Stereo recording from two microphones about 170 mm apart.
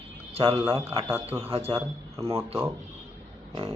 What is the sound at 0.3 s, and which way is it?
A man's voice, 35° right (ahead or behind).